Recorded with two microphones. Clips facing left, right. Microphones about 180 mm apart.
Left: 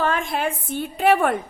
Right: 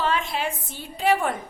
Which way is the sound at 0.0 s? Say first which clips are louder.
Left 3 dB; 50° left (ahead or behind).